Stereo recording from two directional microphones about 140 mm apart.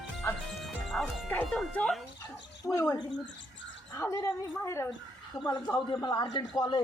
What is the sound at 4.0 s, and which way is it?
Speech, 20° left (ahead or behind).